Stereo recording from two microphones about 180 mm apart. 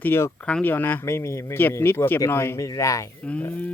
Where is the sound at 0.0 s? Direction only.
15° left (ahead or behind).